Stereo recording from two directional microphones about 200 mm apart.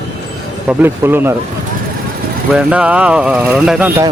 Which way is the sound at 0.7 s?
10° right (ahead or behind).